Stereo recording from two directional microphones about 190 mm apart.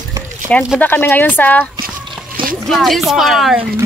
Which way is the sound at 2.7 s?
Centre (ahead or behind).